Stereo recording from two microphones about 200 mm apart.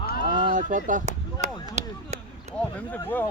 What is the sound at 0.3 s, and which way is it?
Chop, 40° right (ahead or behind).